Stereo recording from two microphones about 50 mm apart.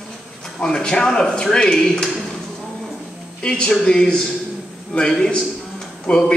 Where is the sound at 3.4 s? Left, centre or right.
Left.